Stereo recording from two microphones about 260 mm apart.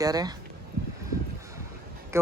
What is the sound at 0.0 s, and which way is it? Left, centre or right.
Speech, centre.